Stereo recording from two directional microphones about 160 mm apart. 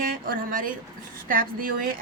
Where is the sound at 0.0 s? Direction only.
65° right (ahead or behind).